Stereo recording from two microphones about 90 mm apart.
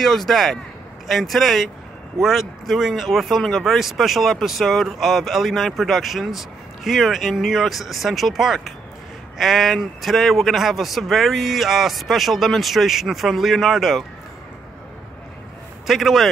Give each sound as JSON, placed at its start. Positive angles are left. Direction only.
{"t": 0.0, "sound": "speech", "side_deg": 0}
{"t": 15.9, "sound": "speech", "side_deg": 0}